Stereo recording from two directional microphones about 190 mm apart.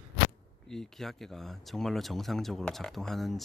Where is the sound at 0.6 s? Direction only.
Centre (ahead or behind).